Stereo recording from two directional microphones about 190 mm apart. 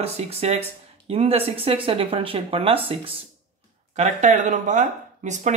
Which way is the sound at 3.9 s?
40° right (ahead or behind).